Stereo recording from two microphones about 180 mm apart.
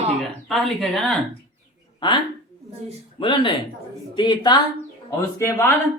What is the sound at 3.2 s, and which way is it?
A woman's voice, 30° left (ahead or behind).